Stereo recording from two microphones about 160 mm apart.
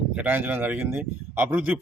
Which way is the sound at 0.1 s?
10° right (ahead or behind).